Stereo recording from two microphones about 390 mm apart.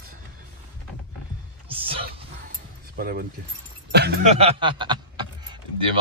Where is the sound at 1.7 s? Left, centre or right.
Centre.